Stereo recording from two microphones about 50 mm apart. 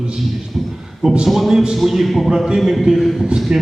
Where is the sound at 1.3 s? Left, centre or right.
Centre.